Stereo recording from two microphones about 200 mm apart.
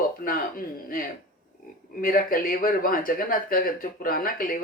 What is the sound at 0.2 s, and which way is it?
Speech, 45° left (ahead or behind).